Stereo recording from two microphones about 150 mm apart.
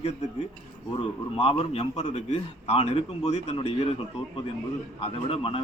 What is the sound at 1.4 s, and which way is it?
A man's voice, 40° left (ahead or behind).